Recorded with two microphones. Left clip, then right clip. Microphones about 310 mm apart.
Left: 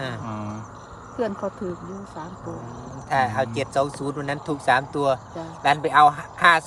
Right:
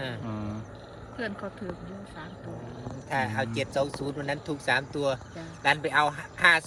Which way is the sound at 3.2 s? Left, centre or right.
Left.